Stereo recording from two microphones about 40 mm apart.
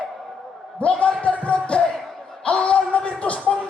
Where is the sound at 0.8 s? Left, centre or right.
Left.